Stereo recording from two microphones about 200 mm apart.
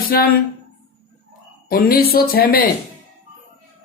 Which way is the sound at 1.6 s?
50° left (ahead or behind).